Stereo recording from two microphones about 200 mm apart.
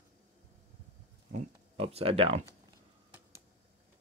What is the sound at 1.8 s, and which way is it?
Speech, 30° right (ahead or behind).